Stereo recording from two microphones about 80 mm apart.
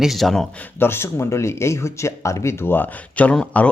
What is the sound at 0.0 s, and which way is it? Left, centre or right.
Speech, centre.